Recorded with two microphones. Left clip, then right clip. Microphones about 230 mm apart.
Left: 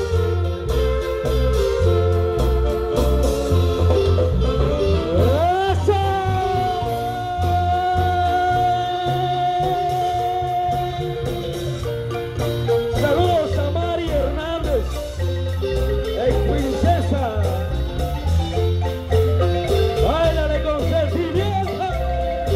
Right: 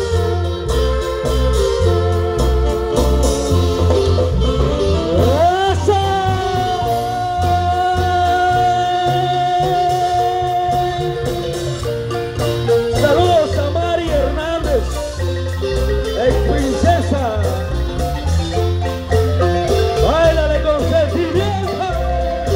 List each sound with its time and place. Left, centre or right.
1.6 s music: right
12.6 s music: right
16.2 s music: right
19.1 s music: right